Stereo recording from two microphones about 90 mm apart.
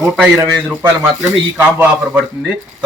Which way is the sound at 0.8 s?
25° right (ahead or behind).